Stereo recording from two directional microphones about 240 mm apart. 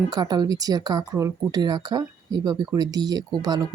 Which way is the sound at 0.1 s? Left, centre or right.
Centre.